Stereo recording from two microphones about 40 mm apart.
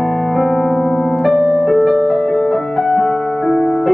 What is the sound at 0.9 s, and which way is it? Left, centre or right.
Music, left.